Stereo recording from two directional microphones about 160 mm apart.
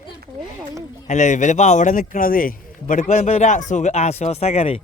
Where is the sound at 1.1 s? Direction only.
50° left (ahead or behind).